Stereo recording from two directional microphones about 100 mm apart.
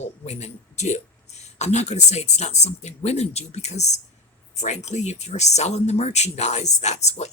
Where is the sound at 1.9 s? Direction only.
90° left.